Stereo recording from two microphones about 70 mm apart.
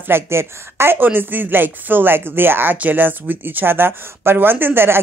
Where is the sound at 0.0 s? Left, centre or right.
Right.